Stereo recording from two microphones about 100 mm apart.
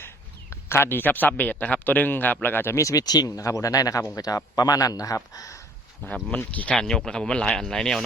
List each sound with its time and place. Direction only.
0.5 s speech: 25° left (ahead or behind)
6.3 s speech: 15° left (ahead or behind)